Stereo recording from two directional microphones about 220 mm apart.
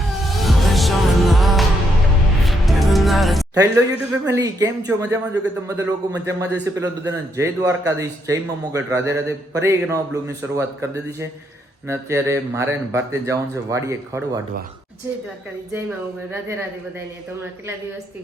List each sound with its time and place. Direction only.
0.3 s music: centre (ahead or behind)
3.5 s speech: 15° right (ahead or behind)